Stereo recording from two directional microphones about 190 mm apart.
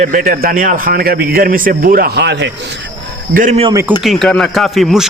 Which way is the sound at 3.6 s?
15° right (ahead or behind).